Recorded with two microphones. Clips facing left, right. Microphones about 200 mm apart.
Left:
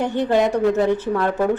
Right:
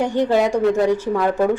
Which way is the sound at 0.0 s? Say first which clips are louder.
Right 1 dB; 15° right (ahead or behind).